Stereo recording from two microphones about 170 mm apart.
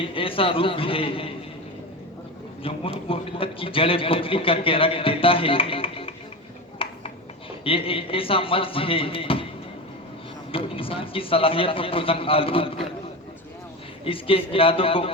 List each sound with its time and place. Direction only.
0.0 s a man's voice: 30° left (ahead or behind)
2.6 s a man's voice: 35° left (ahead or behind)
6.8 s a sound: 30° left (ahead or behind)
7.6 s a man's voice: 35° left (ahead or behind)
10.5 s a man's voice: 30° left (ahead or behind)
14.0 s a man's voice: 30° left (ahead or behind)